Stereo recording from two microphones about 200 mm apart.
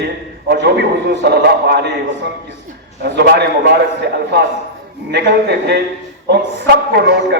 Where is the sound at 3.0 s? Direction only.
55° right (ahead or behind).